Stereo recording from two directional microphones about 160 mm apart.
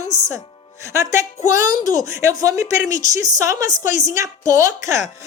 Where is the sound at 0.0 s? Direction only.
20° right (ahead or behind).